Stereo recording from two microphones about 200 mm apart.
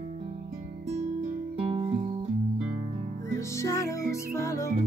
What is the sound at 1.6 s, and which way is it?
Music, 25° right (ahead or behind).